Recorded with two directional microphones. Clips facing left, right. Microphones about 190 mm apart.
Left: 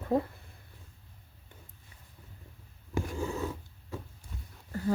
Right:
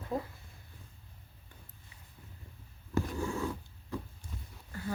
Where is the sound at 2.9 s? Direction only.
20° left (ahead or behind).